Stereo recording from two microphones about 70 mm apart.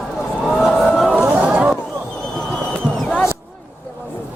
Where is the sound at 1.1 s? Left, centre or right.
Right.